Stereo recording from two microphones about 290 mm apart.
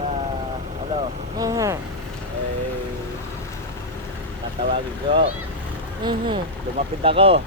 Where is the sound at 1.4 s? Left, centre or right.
Centre.